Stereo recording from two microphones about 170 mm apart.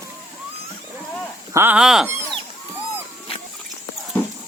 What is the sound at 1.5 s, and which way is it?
Speech, 10° right (ahead or behind).